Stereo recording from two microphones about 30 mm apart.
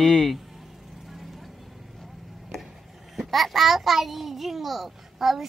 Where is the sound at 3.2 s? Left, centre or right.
Centre.